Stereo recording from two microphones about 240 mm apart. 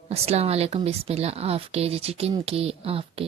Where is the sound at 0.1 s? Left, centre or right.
Right.